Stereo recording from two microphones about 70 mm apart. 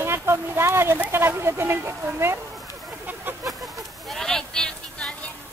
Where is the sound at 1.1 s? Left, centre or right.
Right.